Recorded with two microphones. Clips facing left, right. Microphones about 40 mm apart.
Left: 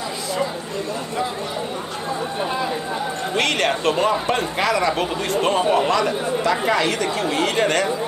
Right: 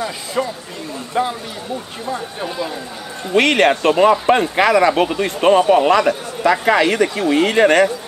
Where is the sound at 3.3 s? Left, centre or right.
Right.